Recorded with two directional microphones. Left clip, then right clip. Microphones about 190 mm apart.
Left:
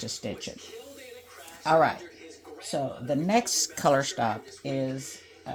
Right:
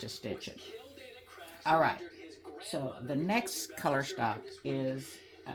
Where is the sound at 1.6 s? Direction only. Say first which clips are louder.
Left 6 dB; 50° left (ahead or behind).